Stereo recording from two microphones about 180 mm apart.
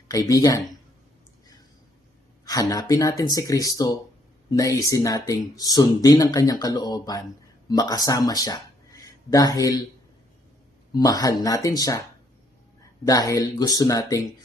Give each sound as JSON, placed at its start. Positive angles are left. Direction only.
{"t": 0.1, "sound": "speech", "side_deg": 20}
{"t": 2.4, "sound": "speech", "side_deg": 20}
{"t": 10.9, "sound": "speech", "side_deg": 20}
{"t": 13.1, "sound": "speech", "side_deg": 20}